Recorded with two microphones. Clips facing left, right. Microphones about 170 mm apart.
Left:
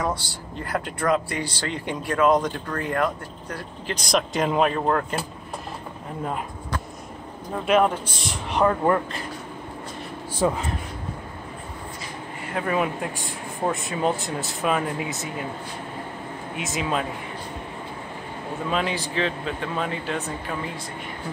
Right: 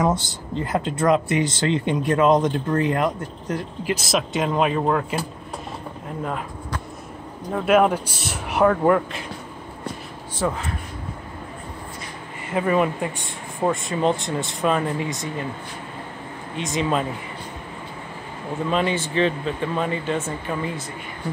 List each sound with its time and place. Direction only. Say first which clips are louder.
0.0 s speech: right 5 dB; 20° right (ahead or behind)
3.8 s speech: even; 5° right (ahead or behind)
7.6 s a man's voice: right 2 dB; 5° right (ahead or behind)
10.4 s speech: left 2 dB; 20° left (ahead or behind)
12.5 s speech: right 4 dB; centre (ahead or behind)
16.5 s speech: right 4 dB; 5° left (ahead or behind)
18.7 s speech: right 3 dB; centre (ahead or behind)